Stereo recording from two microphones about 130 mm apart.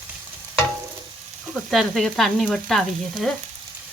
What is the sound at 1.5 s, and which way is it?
Frying, centre (ahead or behind).